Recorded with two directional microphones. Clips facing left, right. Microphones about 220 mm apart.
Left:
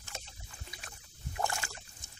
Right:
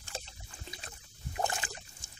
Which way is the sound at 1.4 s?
20° right (ahead or behind).